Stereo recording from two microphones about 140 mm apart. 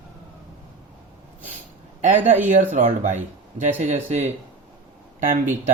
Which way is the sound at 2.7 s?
55° right (ahead or behind).